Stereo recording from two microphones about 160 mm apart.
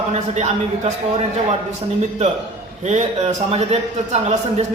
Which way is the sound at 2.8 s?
45° right (ahead or behind).